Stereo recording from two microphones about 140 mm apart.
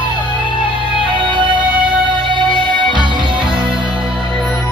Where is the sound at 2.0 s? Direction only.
35° right (ahead or behind).